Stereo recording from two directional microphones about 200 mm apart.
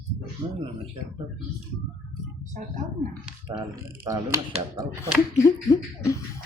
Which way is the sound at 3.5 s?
20° right (ahead or behind).